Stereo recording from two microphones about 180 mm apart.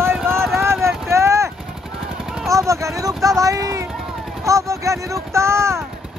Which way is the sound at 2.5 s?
15° right (ahead or behind).